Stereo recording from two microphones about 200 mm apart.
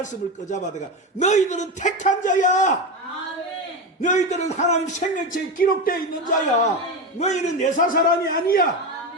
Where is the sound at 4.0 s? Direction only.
35° left (ahead or behind).